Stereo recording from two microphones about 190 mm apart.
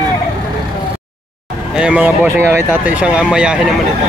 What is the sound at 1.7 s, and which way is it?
Speech, 5° right (ahead or behind).